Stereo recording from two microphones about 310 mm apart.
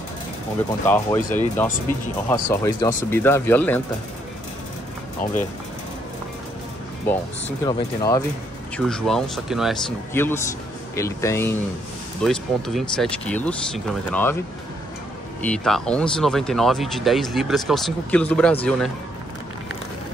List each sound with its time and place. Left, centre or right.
0.8 s speech: centre
5.2 s speech: left
7.1 s speech: centre
15.4 s speech: centre